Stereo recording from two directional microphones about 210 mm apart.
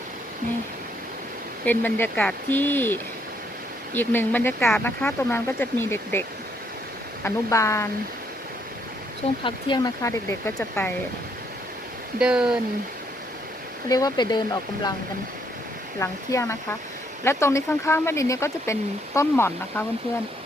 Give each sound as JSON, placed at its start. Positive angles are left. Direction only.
{"t": 1.6, "sound": "speech", "side_deg": 10}
{"t": 7.3, "sound": "speech", "side_deg": 15}
{"t": 9.4, "sound": "speech", "side_deg": 20}
{"t": 12.2, "sound": "speech", "side_deg": -5}
{"t": 13.9, "sound": "speech", "side_deg": 20}
{"t": 16.0, "sound": "speech", "side_deg": 15}